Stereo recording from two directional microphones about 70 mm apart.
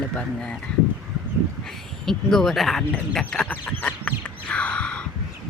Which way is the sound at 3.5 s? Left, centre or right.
Left.